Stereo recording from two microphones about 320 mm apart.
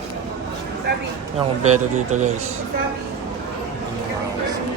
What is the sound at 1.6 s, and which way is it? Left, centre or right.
Speech, right.